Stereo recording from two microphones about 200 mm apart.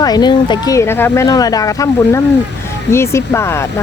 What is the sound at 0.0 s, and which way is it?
Speech, 20° left (ahead or behind).